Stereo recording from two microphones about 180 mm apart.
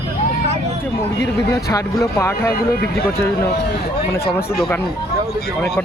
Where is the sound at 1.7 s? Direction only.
15° left (ahead or behind).